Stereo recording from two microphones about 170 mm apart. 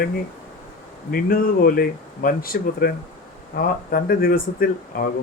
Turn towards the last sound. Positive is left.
turn(degrees=60)  # may be behind; listen again after turning